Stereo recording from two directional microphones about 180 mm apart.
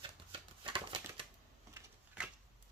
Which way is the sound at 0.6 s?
30° right (ahead or behind).